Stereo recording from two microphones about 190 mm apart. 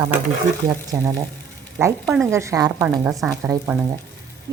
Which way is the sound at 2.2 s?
15° right (ahead or behind).